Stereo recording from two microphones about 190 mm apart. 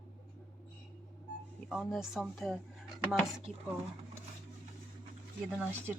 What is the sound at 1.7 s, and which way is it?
Speech, centre (ahead or behind).